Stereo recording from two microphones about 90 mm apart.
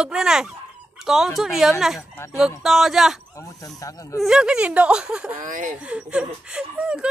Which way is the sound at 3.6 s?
40° left (ahead or behind).